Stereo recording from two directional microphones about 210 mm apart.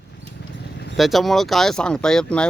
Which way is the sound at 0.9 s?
Centre (ahead or behind).